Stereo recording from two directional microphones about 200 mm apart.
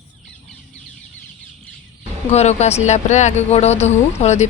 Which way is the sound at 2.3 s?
35° left (ahead or behind).